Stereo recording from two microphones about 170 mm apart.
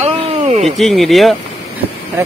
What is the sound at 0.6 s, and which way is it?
Speech, centre (ahead or behind).